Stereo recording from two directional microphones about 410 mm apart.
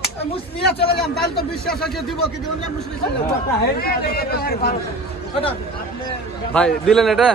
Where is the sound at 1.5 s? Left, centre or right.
Centre.